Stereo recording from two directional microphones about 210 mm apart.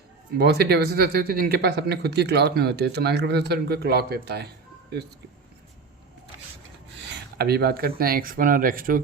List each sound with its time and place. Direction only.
0.3 s speech: 50° right (ahead or behind)
7.3 s speech: 50° right (ahead or behind)